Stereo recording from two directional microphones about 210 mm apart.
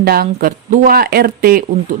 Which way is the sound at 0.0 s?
45° right (ahead or behind).